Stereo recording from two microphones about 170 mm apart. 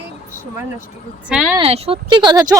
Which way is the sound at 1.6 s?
35° right (ahead or behind).